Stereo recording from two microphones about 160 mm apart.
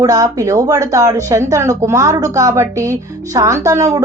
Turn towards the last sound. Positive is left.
turn(degrees=-20)  # may be behind; listen again after turning